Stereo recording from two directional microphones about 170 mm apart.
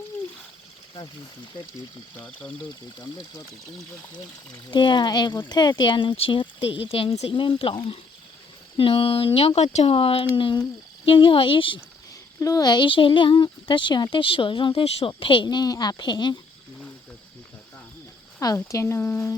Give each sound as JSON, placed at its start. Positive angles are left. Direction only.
{"t": 2.1, "sound": "speech", "side_deg": 10}
{"t": 4.1, "sound": "speech", "side_deg": 25}
{"t": 8.8, "sound": "speech", "side_deg": 30}
{"t": 18.3, "sound": "speech", "side_deg": 20}